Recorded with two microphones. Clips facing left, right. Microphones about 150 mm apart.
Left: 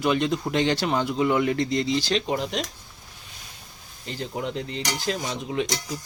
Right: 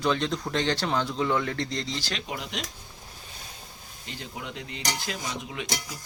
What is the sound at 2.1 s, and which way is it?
Cutlery, 35° left (ahead or behind).